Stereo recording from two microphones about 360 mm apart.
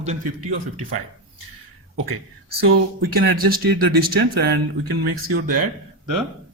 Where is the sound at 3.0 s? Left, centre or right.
Right.